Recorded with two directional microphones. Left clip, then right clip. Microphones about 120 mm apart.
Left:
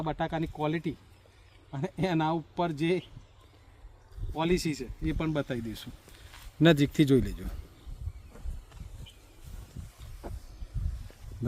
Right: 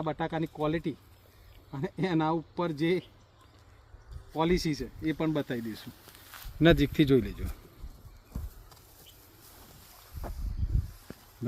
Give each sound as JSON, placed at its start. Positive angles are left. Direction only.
{"t": 0.0, "sound": "speech", "side_deg": 15}
{"t": 4.4, "sound": "speech", "side_deg": 10}
{"t": 6.6, "sound": "a man's voice", "side_deg": 65}